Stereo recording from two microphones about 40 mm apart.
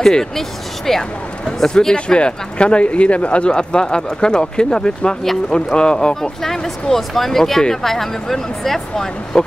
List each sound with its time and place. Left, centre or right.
0.0 s speech: centre
2.0 s speech: left